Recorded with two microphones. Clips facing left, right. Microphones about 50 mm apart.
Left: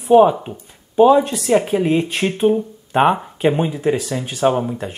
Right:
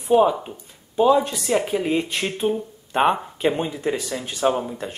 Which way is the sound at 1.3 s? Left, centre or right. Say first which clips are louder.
Left 6 dB; left.